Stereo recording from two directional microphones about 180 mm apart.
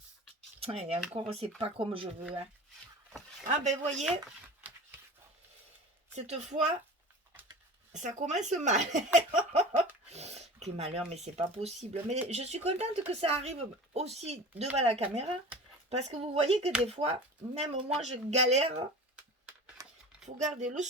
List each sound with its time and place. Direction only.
0.6 s speech: 35° right (ahead or behind)
3.5 s speech: 40° right (ahead or behind)
6.1 s speech: 40° right (ahead or behind)
7.9 s speech: 40° right (ahead or behind)
9.1 s a sound: 40° right (ahead or behind)
10.8 s speech: 35° right (ahead or behind)
19.8 s a sound: 20° right (ahead or behind)
20.2 s speech: 40° right (ahead or behind)